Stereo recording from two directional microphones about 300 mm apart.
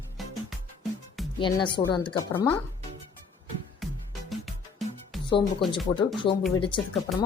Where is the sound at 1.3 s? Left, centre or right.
Centre.